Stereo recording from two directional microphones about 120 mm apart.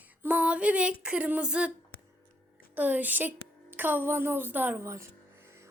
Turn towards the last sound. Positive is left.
turn(degrees=-25)  # may be behind; listen again after turning